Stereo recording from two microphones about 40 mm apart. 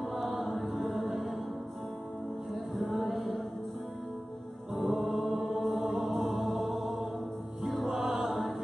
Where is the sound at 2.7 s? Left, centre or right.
Centre.